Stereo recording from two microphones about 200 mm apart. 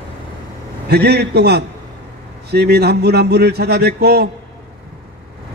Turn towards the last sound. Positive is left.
turn(degrees=-50)  # may be behind; listen again after turning